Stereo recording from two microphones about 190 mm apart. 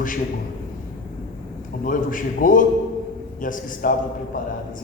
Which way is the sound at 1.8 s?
45° left (ahead or behind).